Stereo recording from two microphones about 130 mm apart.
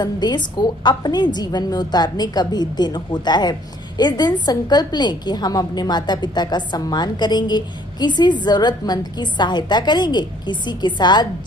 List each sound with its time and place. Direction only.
0.0 s a woman's voice: 35° left (ahead or behind)